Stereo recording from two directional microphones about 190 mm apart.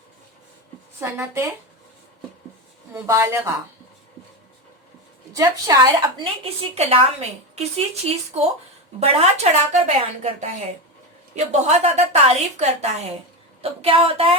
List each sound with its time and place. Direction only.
0.9 s speech: 10° right (ahead or behind)
2.9 s speech: 15° right (ahead or behind)
5.3 s a woman's voice: 15° right (ahead or behind); by 9.9 s 35° right (ahead or behind)
11.3 s a woman's voice: 35° right (ahead or behind)